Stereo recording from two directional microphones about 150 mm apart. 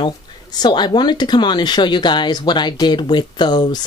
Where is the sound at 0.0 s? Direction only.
30° left (ahead or behind).